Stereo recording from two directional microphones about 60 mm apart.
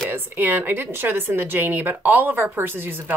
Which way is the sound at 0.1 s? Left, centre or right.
Right.